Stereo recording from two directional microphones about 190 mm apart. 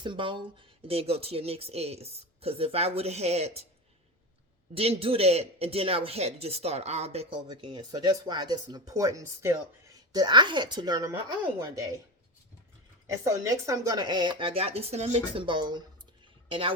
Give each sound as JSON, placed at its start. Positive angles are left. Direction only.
{"t": 0.0, "sound": "speech", "side_deg": -25}
{"t": 4.7, "sound": "speech", "side_deg": -30}
{"t": 13.2, "sound": "speech", "side_deg": -15}